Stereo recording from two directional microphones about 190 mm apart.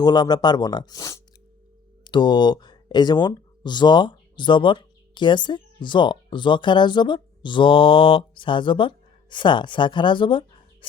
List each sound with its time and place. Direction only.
0.0 s speech: 20° left (ahead or behind)